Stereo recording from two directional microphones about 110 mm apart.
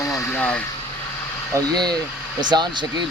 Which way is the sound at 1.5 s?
40° right (ahead or behind).